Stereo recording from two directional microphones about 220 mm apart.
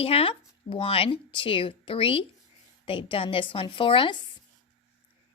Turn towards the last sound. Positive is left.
turn(degrees=25)  # may be behind; listen again after turning